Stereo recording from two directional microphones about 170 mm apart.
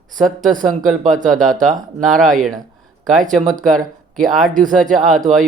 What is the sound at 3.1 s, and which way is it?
Speech, 50° right (ahead or behind).